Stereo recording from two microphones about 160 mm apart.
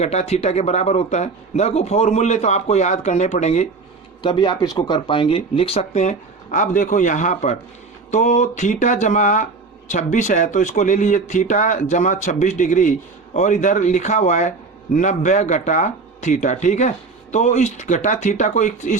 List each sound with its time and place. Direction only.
0.0 s speech: 45° left (ahead or behind)
4.2 s speech: 30° left (ahead or behind); by 18.9 s 50° left (ahead or behind)